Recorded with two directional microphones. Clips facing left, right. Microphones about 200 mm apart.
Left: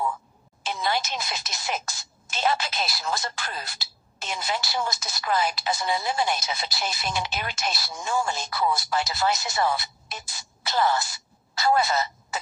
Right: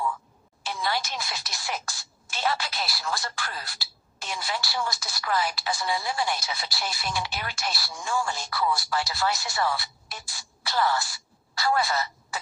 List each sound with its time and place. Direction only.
0.6 s speech: 20° left (ahead or behind)